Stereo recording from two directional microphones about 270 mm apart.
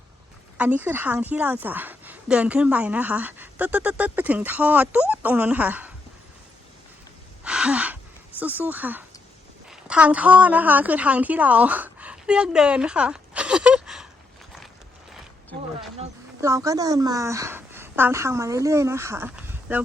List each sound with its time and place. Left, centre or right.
0.5 s a woman's voice: centre
7.4 s gasp: centre
8.4 s a woman's voice: centre
16.4 s a woman's voice: centre